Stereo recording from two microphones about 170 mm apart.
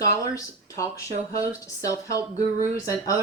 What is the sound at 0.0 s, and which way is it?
A woman's voice, 20° left (ahead or behind).